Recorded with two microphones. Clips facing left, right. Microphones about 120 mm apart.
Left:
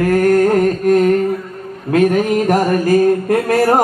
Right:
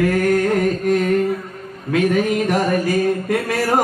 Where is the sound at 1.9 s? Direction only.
45° left (ahead or behind).